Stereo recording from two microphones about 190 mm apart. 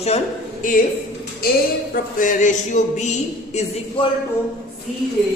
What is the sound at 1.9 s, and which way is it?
Speech, 45° left (ahead or behind).